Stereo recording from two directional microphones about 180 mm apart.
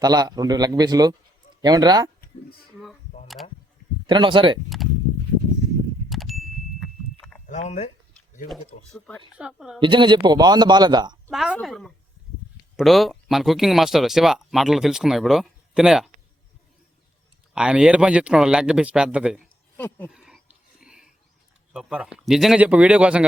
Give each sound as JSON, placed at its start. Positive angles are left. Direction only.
{"t": 0.0, "sound": "a man's voice", "side_deg": -20}
{"t": 2.8, "sound": "speech", "side_deg": 0}
{"t": 4.0, "sound": "a man's voice", "side_deg": -25}
{"t": 6.1, "sound": "ding", "side_deg": 0}
{"t": 7.4, "sound": "speech", "side_deg": 40}
{"t": 8.9, "sound": "speech", "side_deg": 10}
{"t": 9.4, "sound": "speech", "side_deg": -5}
{"t": 9.8, "sound": "a man's voice", "side_deg": -25}
{"t": 11.3, "sound": "speech", "side_deg": 0}
{"t": 17.5, "sound": "speech", "side_deg": -5}
{"t": 19.7, "sound": "speech", "side_deg": 10}
{"t": 20.1, "sound": "a sound", "side_deg": -5}
{"t": 21.7, "sound": "speech", "side_deg": -5}